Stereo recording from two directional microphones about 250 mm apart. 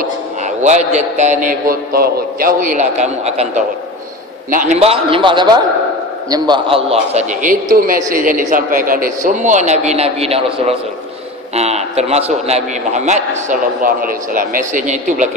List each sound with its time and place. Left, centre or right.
0.6 s a man's voice: right